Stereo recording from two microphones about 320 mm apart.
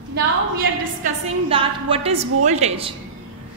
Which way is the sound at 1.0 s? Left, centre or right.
Centre.